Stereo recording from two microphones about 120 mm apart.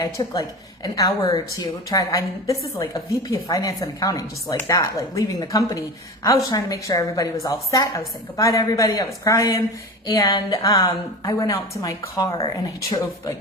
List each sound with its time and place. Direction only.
0.0 s a woman's voice: 30° left (ahead or behind)